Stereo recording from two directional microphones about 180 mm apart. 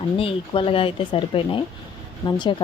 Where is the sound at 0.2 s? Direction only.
30° left (ahead or behind).